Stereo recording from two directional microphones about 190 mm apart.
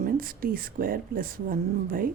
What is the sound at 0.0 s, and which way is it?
A woman's voice, 50° right (ahead or behind).